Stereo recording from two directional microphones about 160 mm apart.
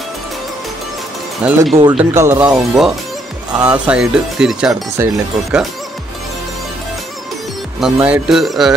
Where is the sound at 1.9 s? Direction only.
15° right (ahead or behind).